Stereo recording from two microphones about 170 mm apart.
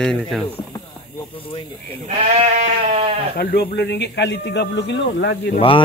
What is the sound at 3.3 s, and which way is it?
Speech, 65° left (ahead or behind).